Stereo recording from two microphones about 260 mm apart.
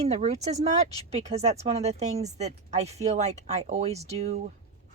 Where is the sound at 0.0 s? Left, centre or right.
Right.